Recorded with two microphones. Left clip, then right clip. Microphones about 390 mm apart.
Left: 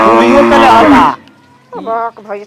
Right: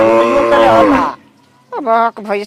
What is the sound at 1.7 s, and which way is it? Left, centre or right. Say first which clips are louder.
Speech: right 4 dB; right.